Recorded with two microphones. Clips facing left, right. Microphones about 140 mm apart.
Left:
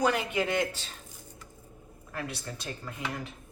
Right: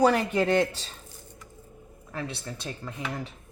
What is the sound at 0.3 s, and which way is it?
Speech, 30° right (ahead or behind).